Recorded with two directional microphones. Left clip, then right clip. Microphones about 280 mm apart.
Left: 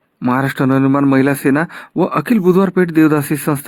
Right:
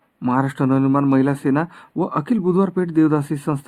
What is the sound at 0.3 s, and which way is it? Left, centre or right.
A man's voice, left.